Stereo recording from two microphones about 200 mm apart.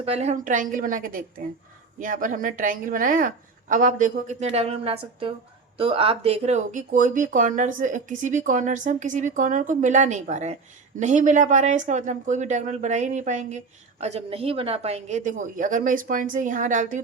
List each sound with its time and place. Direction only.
0.0 s speech: 30° right (ahead or behind)